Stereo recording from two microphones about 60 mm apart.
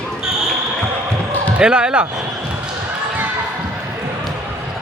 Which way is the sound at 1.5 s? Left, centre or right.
Centre.